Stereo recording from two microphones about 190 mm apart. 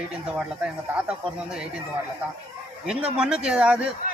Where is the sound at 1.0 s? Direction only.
5° right (ahead or behind).